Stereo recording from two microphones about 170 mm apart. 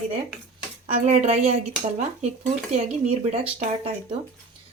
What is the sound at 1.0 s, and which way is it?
Speech, 40° right (ahead or behind).